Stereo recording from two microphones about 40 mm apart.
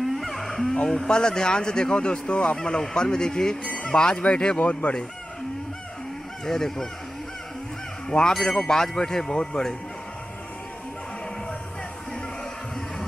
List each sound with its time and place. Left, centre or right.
0.0 s a sound: centre
1.0 s speech: centre
2.5 s speech: centre
6.4 s speech: centre
8.1 s speech: left